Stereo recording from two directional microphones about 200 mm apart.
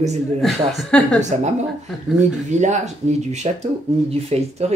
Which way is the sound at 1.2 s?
35° right (ahead or behind).